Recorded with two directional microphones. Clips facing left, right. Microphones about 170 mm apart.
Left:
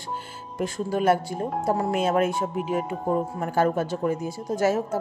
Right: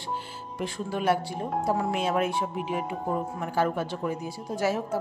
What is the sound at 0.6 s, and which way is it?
Speech, 40° left (ahead or behind).